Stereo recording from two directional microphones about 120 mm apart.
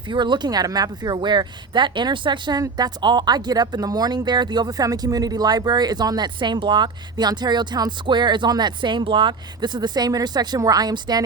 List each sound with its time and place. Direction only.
0.1 s speech: 40° right (ahead or behind)